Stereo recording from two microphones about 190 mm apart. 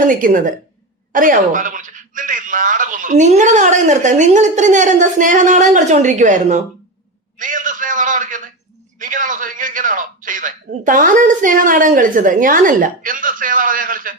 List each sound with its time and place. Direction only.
0.1 s speech: 45° right (ahead or behind)
7.3 s a sound: 45° right (ahead or behind)
9.0 s a man's voice: 45° right (ahead or behind)